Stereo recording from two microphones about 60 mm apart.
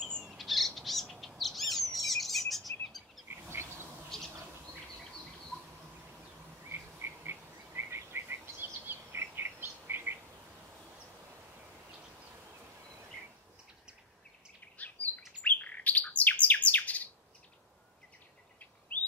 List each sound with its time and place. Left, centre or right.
0.3 s bird: centre
1.4 s bird vocalization: centre
3.3 s insect: right
4.1 s bird: centre
6.7 s bird: right
14.8 s bird: left
18.9 s bird: left